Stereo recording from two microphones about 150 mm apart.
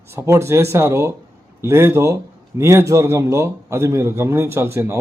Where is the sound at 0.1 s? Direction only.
15° right (ahead or behind).